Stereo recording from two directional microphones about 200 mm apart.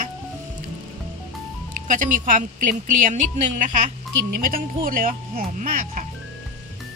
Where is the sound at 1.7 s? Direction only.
40° right (ahead or behind).